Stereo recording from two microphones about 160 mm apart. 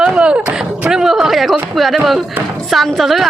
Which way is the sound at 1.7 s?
Centre (ahead or behind).